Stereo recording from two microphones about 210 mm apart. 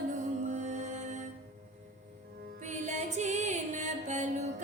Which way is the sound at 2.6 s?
35° right (ahead or behind).